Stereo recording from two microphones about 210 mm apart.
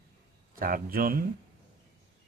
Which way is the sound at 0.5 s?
45° right (ahead or behind).